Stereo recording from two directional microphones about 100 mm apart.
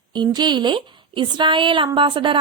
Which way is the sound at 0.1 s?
50° right (ahead or behind).